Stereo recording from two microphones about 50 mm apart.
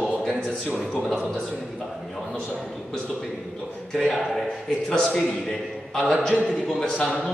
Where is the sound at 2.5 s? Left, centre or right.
Centre.